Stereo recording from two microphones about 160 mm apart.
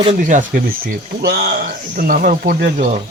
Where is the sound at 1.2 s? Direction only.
80° right.